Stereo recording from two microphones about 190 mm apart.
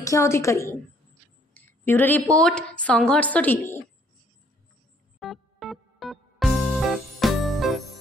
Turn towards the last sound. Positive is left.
turn(degrees=0)  # may be behind; listen again after turning